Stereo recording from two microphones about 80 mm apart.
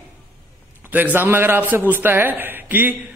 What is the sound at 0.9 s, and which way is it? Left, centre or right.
A man's voice, right.